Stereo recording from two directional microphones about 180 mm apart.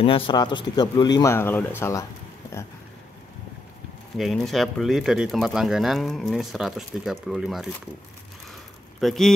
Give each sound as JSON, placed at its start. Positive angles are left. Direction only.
{"t": 0.0, "sound": "speech", "side_deg": 30}
{"t": 4.2, "sound": "speech", "side_deg": 0}
{"t": 9.0, "sound": "speech", "side_deg": 0}